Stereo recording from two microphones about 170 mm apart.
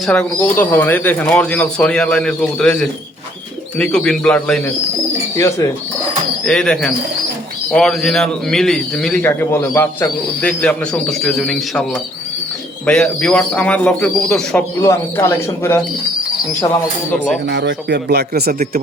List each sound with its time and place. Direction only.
0.0 s speech: 5° left (ahead or behind)
5.4 s speech: 15° left (ahead or behind)
6.4 s speech: 5° left (ahead or behind)
14.8 s speech: 15° left (ahead or behind)
17.4 s speech: 85° right; by 18.8 s 65° right (ahead or behind)